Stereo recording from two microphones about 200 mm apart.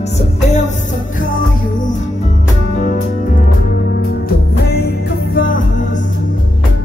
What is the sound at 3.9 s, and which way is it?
Music, 55° left (ahead or behind).